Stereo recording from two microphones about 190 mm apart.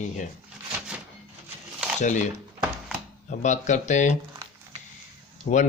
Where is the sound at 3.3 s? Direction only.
40° left (ahead or behind).